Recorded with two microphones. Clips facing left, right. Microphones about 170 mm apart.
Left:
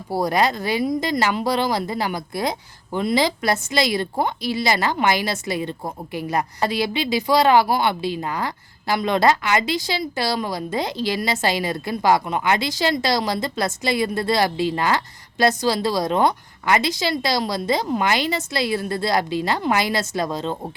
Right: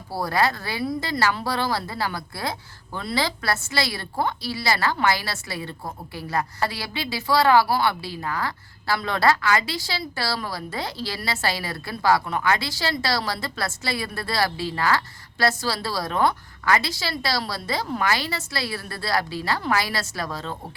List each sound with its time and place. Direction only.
0.1 s a woman's voice: 15° left (ahead or behind)